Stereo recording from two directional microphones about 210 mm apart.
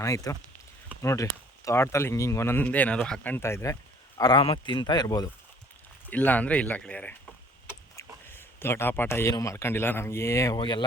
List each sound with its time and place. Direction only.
0.0 s speech: 15° left (ahead or behind)
6.1 s speech: 5° left (ahead or behind)